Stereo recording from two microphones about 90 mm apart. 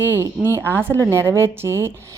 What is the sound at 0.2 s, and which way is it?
A woman's voice, 25° right (ahead or behind).